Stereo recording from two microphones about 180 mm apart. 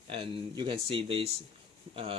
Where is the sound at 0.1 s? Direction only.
30° right (ahead or behind).